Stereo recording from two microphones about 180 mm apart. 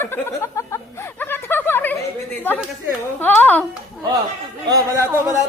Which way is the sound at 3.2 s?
10° left (ahead or behind).